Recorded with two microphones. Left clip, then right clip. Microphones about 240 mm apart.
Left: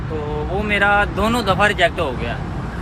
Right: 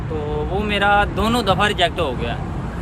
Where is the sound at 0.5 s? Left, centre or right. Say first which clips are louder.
Left 1 dB; centre.